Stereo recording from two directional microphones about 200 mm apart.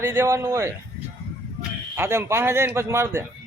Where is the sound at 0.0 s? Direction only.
10° right (ahead or behind).